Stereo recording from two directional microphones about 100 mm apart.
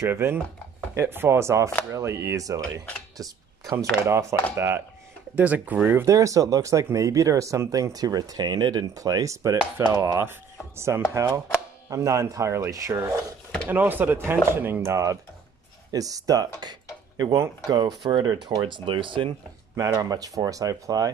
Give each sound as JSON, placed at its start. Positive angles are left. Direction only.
{"t": 0.0, "sound": "speech", "side_deg": -25}
{"t": 6.0, "sound": "speech", "side_deg": -35}
{"t": 13.7, "sound": "speech", "side_deg": -20}
{"t": 19.7, "sound": "speech", "side_deg": -30}